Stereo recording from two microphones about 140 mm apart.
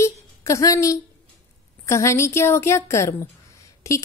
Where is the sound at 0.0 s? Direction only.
20° left (ahead or behind).